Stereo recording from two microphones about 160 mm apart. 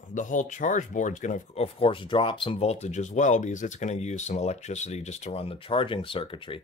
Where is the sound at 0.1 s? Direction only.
50° left (ahead or behind).